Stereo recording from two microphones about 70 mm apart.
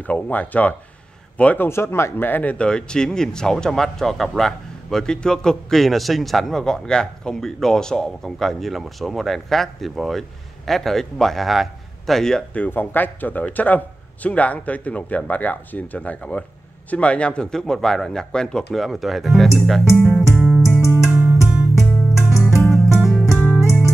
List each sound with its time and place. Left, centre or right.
0.0 s a man's voice: left
1.7 s speech: left
2.5 s speech: centre
12.5 s a man's voice: left; by 20.1 s centre
20.1 s music: centre
21.1 s music: right
22.7 s music: centre